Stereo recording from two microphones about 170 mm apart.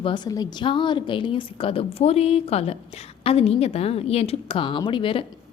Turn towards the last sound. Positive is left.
turn(degrees=30)  # may be behind; listen again after turning